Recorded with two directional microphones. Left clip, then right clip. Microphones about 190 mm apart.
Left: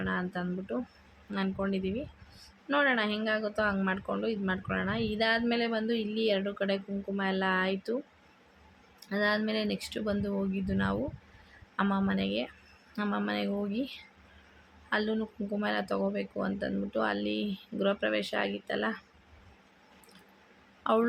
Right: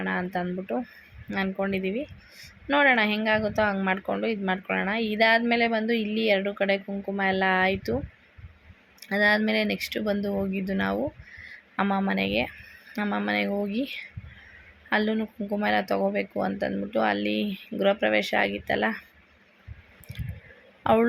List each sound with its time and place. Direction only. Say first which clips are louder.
0.0 s speech: right 5 dB; 20° right (ahead or behind)
9.0 s speech: right 7 dB; 20° right (ahead or behind)
20.8 s a man's voice: right 6 dB; 20° right (ahead or behind)